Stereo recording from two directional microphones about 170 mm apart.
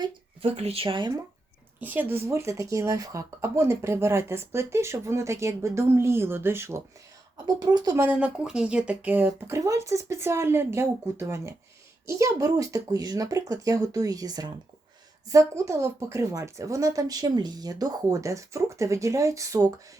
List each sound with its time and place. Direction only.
0.0 s speech: 35° right (ahead or behind)
1.8 s speech: 10° right (ahead or behind)